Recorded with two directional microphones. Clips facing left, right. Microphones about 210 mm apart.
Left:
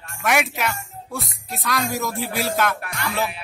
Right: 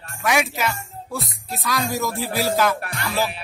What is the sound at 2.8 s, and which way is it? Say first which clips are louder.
Music: even; 35° right (ahead or behind).